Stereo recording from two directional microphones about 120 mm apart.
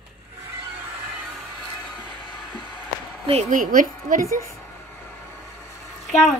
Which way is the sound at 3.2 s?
65° right (ahead or behind).